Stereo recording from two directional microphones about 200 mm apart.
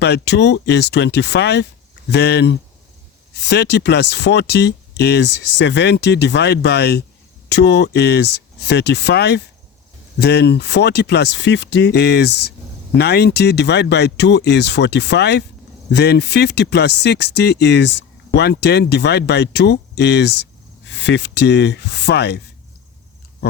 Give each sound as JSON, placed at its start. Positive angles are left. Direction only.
{"t": 0.0, "sound": "speech", "side_deg": 55}